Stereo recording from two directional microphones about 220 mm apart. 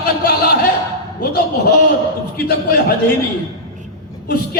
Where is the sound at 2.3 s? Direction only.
45° left (ahead or behind).